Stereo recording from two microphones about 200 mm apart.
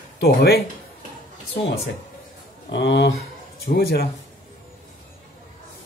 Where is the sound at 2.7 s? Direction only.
60° left (ahead or behind).